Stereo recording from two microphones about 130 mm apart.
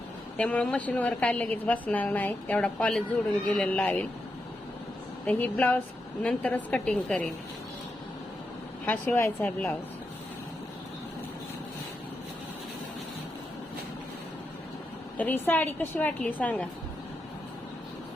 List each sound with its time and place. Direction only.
0.3 s a woman's voice: 10° left (ahead or behind)
5.2 s a woman's voice: 10° left (ahead or behind)
8.9 s a woman's voice: 15° left (ahead or behind)
15.2 s a woman's voice: 15° left (ahead or behind)